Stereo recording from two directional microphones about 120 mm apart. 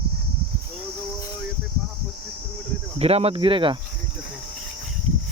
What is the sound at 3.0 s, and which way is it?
Speech, 55° right (ahead or behind).